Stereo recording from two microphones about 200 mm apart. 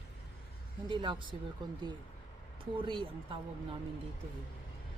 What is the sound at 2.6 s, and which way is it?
Speech, 25° right (ahead or behind).